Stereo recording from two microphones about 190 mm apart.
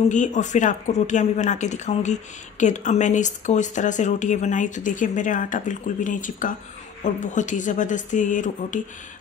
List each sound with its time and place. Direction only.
0.1 s speech: 40° left (ahead or behind)